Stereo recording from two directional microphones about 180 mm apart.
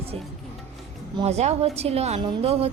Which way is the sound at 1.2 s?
35° right (ahead or behind).